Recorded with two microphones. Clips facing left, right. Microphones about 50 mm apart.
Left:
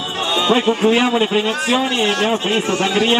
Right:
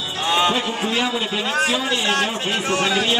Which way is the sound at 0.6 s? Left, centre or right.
Left.